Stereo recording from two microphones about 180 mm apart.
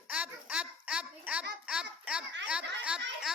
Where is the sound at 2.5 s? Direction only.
5° right (ahead or behind).